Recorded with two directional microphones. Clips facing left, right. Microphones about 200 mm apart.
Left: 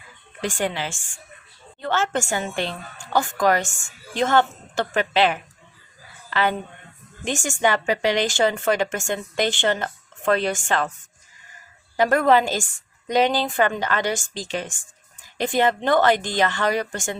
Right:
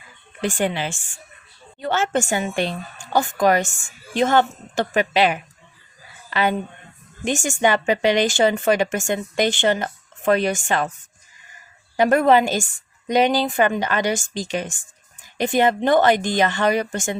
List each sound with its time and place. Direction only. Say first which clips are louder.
0.4 s a woman's voice: right 3 dB; 15° right (ahead or behind)
11.9 s a woman's voice: right 2 dB; 20° right (ahead or behind)